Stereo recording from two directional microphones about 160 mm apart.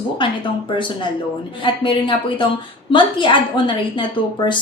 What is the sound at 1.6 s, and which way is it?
Speech, 30° left (ahead or behind).